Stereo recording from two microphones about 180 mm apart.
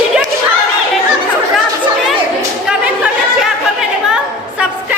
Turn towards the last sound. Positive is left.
turn(degrees=-5)  # may be behind; listen again after turning